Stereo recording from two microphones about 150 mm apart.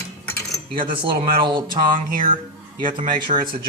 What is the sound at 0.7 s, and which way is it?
Speech, 35° right (ahead or behind).